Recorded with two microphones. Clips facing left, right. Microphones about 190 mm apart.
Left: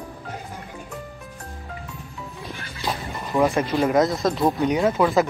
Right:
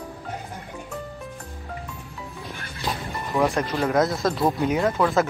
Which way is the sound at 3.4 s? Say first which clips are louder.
Left 3 dB; centre (ahead or behind).